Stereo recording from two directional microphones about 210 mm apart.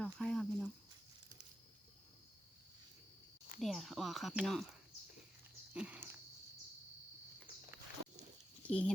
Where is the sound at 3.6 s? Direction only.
Centre (ahead or behind).